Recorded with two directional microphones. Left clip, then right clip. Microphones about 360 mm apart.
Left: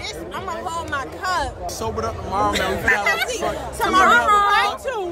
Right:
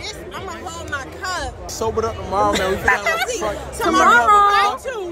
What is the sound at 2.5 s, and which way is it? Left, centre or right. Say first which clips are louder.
Speech: right 1 dB; centre.